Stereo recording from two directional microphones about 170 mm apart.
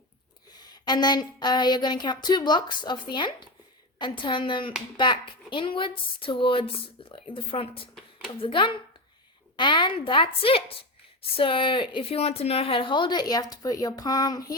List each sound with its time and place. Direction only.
0.6 s a woman's voice: 25° left (ahead or behind)